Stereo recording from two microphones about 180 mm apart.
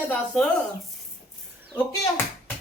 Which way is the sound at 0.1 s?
10° left (ahead or behind).